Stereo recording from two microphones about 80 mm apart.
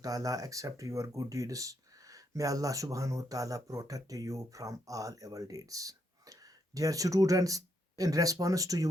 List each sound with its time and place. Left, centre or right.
0.0 s speech: right